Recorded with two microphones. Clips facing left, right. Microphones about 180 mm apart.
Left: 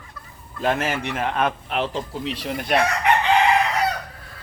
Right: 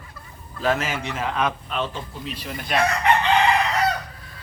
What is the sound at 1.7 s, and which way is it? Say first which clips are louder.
Speech: left 3 dB; 85° left.